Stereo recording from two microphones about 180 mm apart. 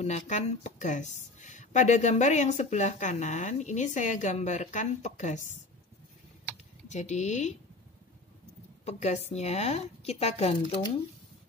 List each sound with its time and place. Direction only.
0.0 s a woman's voice: 40° left (ahead or behind)
6.9 s a woman's voice: 40° left (ahead or behind)
8.8 s a woman's voice: 40° left (ahead or behind)